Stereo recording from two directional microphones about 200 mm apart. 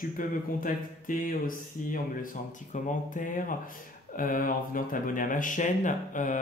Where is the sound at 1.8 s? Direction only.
40° left (ahead or behind).